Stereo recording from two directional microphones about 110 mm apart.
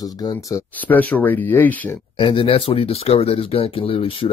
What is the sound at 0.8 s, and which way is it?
Speech, 15° left (ahead or behind).